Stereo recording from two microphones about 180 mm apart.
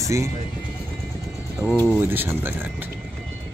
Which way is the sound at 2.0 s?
10° right (ahead or behind).